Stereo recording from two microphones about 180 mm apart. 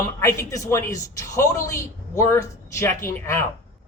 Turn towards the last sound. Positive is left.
turn(degrees=15)  # may be behind; listen again after turning